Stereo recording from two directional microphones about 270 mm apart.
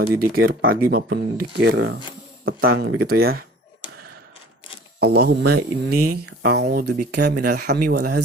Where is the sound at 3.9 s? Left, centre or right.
Right.